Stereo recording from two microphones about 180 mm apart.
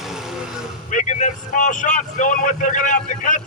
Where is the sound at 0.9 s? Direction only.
45° left (ahead or behind).